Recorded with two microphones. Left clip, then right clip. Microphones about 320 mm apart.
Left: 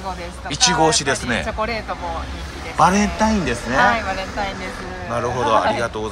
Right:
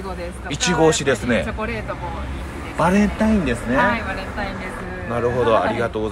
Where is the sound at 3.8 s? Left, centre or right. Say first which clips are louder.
Left 4 dB; left.